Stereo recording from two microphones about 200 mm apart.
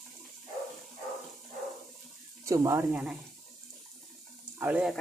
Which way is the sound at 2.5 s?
15° right (ahead or behind).